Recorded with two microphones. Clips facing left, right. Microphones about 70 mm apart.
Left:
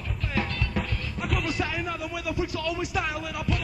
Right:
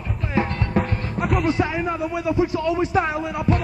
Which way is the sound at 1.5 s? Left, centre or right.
Right.